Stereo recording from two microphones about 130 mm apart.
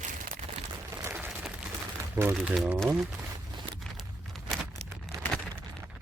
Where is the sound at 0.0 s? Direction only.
90° right.